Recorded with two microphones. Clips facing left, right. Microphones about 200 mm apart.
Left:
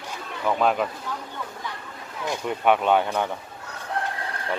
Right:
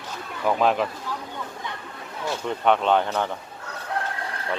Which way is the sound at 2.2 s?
10° left (ahead or behind).